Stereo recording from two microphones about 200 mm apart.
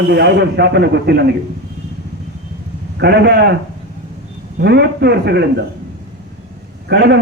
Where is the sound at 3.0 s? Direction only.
55° right (ahead or behind).